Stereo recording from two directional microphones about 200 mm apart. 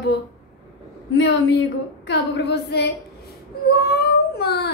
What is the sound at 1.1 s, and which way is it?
A woman's voice, 60° left (ahead or behind).